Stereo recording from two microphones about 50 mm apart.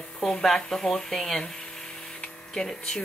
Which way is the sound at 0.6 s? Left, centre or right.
Centre.